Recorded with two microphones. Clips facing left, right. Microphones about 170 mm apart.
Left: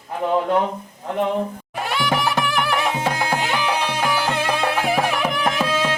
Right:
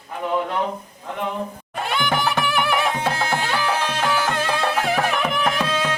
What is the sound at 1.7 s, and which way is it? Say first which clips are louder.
Music: right 1 dB; 5° left (ahead or behind).